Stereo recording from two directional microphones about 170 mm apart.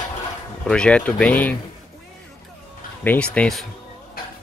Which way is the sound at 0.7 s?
5° left (ahead or behind).